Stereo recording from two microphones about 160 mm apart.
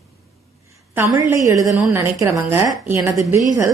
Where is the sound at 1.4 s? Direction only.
20° right (ahead or behind).